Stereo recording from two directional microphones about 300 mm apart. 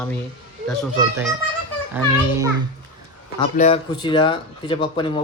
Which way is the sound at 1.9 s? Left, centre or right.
Centre.